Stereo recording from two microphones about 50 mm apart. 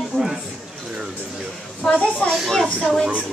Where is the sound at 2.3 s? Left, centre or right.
Centre.